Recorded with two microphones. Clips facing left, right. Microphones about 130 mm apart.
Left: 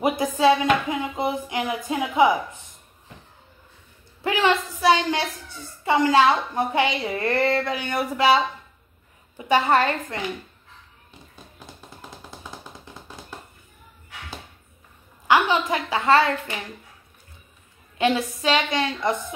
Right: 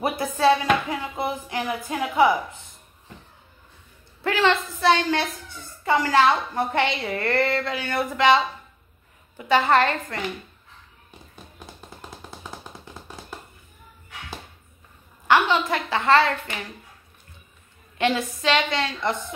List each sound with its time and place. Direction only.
0.0 s music: 15° left (ahead or behind)
0.4 s a woman's voice: 15° left (ahead or behind)
4.2 s a woman's voice: 15° left (ahead or behind)
15.2 s a woman's voice: 15° left (ahead or behind)
17.9 s a woman's voice: 10° left (ahead or behind)